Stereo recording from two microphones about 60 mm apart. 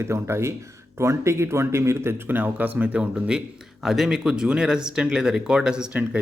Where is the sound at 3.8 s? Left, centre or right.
Centre.